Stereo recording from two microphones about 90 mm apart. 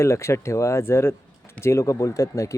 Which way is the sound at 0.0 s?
30° left (ahead or behind).